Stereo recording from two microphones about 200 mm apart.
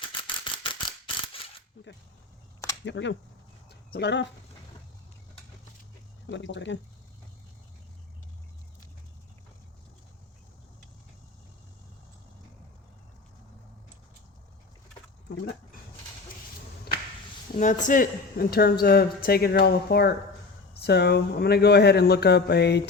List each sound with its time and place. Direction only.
0.2 s mechanisms: 25° left (ahead or behind)
2.8 s speech: 65° left (ahead or behind)
3.7 s a sound: 55° left (ahead or behind)
6.3 s speech: 65° left (ahead or behind)
17.5 s speech: 40° left (ahead or behind); by 22.8 s 55° left (ahead or behind)